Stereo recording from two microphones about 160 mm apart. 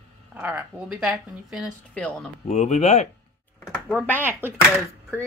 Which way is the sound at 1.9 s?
5° left (ahead or behind).